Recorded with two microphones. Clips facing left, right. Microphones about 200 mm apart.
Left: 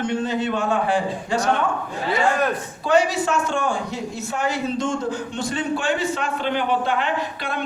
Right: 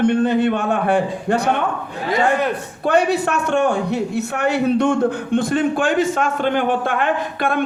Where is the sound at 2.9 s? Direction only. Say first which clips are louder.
Right 2 dB; 60° right (ahead or behind).